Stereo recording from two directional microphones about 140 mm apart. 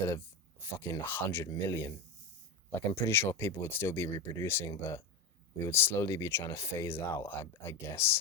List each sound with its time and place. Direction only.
0.6 s speech: 15° left (ahead or behind)